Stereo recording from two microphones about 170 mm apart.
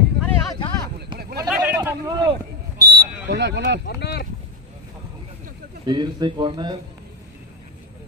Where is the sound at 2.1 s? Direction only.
25° right (ahead or behind).